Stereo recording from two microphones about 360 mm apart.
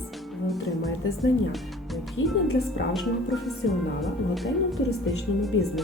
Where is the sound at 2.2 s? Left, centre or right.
Left.